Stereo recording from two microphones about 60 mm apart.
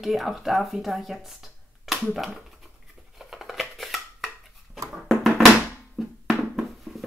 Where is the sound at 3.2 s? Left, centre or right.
Centre.